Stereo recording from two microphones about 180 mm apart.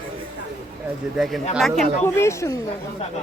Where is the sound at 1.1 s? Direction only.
Centre (ahead or behind).